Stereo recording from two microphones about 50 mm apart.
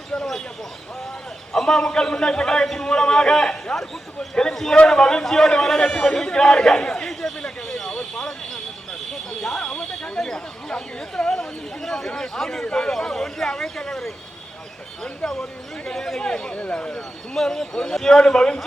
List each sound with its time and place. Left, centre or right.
1.5 s a man's voice: centre
7.9 s a sound: centre
9.8 s a man's voice: centre
17.3 s a man's voice: centre